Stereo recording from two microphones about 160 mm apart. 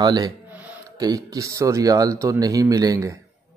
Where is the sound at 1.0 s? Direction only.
20° right (ahead or behind).